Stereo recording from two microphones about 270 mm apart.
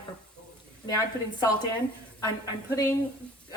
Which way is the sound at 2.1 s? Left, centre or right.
Centre.